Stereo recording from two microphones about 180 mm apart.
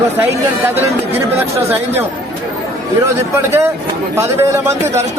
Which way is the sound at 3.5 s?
15° right (ahead or behind).